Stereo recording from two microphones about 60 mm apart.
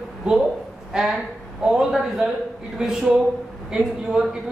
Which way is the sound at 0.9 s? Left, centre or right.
Centre.